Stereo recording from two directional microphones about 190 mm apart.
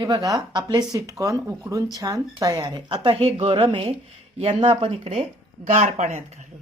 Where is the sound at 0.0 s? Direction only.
20° right (ahead or behind); by 6.2 s 35° right (ahead or behind).